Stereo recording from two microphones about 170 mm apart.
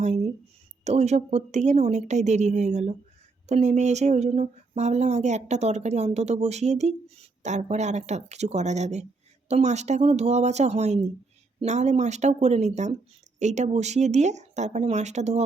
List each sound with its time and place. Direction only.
0.0 s a woman's voice: 40° right (ahead or behind)